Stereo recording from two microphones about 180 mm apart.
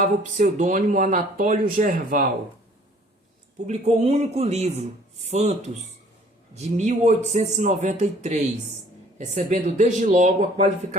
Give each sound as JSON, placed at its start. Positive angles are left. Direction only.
{"t": 0.0, "sound": "speech", "side_deg": -45}
{"t": 3.7, "sound": "a man's voice", "side_deg": -35}